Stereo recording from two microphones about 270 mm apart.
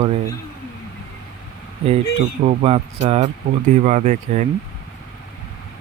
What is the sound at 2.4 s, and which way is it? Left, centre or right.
Speech, right.